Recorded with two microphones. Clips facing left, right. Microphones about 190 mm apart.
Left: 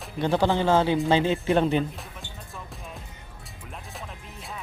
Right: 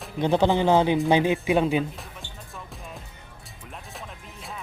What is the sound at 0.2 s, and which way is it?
Speech, 15° right (ahead or behind).